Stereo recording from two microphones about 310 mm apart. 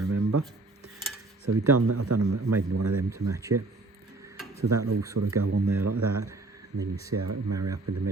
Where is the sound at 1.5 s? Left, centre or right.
Right.